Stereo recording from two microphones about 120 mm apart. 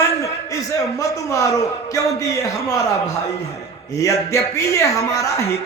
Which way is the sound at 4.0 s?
25° left (ahead or behind).